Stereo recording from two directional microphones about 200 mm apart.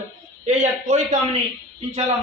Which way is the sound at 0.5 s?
35° right (ahead or behind).